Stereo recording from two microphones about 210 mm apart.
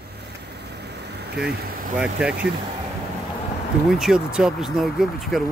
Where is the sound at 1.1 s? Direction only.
50° right (ahead or behind).